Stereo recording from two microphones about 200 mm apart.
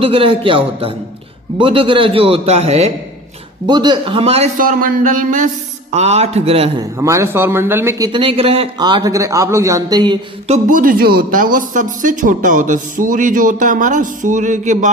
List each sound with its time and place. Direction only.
0.0 s a man's voice: 25° right (ahead or behind)
4.6 s speech: 40° right (ahead or behind)
7.0 s speech: 15° right (ahead or behind); by 14.8 s 40° right (ahead or behind)